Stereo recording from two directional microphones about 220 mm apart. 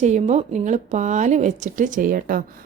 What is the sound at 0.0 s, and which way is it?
Speech, 30° right (ahead or behind).